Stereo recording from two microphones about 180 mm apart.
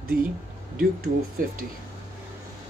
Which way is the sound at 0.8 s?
55° right (ahead or behind).